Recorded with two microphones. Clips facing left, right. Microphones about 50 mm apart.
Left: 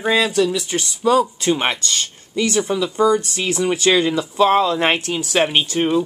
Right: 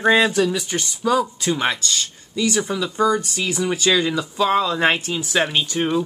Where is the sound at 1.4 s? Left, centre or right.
Left.